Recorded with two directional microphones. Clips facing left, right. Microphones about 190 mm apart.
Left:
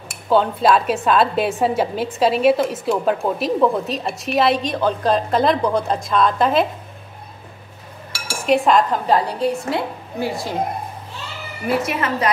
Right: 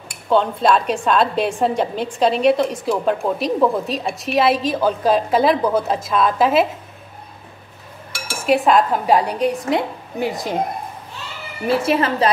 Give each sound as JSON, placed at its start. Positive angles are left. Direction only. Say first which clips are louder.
{"t": 0.3, "sound": "speech", "louder": "even", "side_deg": 5}
{"t": 8.3, "sound": "dishes", "louder": "even", "side_deg": 0}
{"t": 11.6, "sound": "a woman's voice", "louder": "right 3 dB", "side_deg": -30}